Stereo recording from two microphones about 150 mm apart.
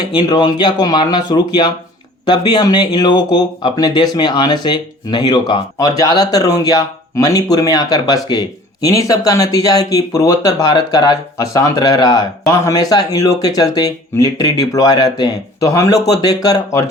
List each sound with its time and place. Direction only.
0.0 s speech: 30° left (ahead or behind)